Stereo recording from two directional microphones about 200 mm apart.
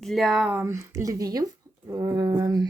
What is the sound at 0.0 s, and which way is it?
Speech, centre (ahead or behind).